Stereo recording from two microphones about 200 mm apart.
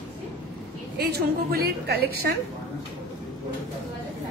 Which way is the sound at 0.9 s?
50° right (ahead or behind).